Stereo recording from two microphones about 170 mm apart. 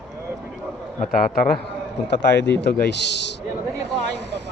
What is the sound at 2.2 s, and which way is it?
Speech, 90° left.